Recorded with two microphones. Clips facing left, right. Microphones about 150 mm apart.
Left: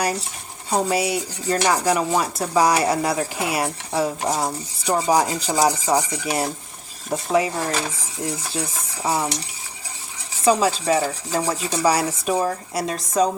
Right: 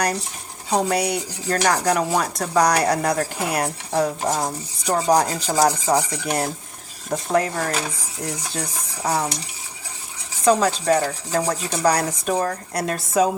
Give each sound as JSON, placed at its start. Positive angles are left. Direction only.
{"t": 0.7, "sound": "dishes", "side_deg": 5}
{"t": 10.4, "sound": "dishes", "side_deg": 5}